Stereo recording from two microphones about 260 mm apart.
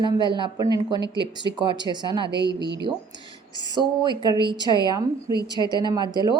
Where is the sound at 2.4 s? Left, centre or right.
Right.